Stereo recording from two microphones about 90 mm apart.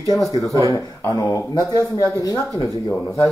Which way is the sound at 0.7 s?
40° left (ahead or behind).